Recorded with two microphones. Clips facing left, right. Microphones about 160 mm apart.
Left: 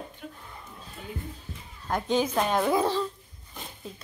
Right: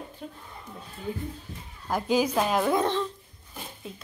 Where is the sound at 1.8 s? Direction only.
5° right (ahead or behind).